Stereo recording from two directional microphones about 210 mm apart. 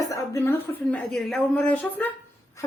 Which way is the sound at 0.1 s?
10° left (ahead or behind).